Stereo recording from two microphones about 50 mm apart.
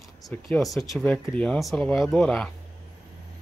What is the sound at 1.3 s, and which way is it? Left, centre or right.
Speech, left.